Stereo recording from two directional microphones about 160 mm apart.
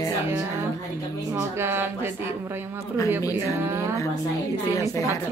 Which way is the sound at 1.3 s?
15° right (ahead or behind).